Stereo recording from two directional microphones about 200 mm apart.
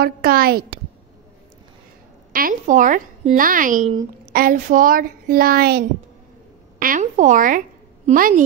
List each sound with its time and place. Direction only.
0.0 s speech: 50° right (ahead or behind)
2.3 s a woman's voice: 40° right (ahead or behind)